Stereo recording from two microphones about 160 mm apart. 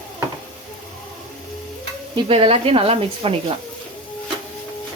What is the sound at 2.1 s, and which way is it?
Speech, 35° right (ahead or behind).